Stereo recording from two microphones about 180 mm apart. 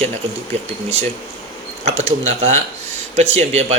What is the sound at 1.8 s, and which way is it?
Speech, 35° right (ahead or behind).